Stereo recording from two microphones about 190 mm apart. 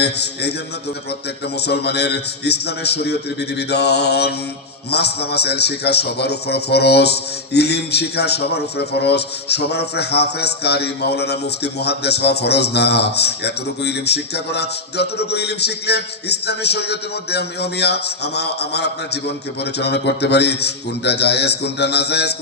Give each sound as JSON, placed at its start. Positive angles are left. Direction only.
{"t": 0.0, "sound": "a man's voice", "side_deg": 60}
{"t": 1.6, "sound": "a man's voice", "side_deg": 60}